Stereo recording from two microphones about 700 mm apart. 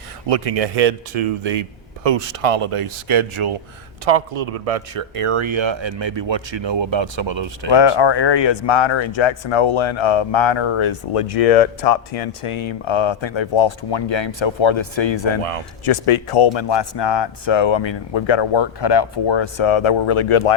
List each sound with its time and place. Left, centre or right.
0.3 s speech: right
4.0 s speech: right
7.7 s speech: left